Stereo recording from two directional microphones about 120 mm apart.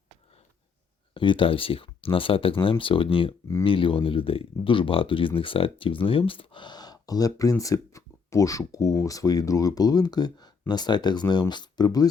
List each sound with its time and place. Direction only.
1.1 s speech: 45° left (ahead or behind)